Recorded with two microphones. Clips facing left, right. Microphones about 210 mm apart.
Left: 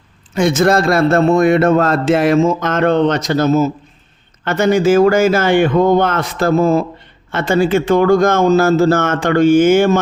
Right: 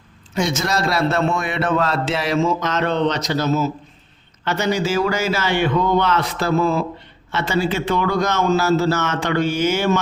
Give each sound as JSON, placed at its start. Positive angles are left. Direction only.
{"t": 0.3, "sound": "a man's voice", "side_deg": 55}